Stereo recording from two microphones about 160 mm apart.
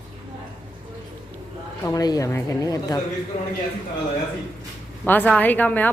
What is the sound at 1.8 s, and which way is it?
Speech, 20° left (ahead or behind).